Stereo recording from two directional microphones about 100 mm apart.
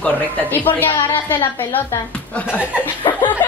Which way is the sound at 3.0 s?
45° left (ahead or behind).